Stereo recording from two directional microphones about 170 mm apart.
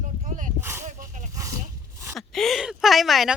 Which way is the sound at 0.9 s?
45° right (ahead or behind).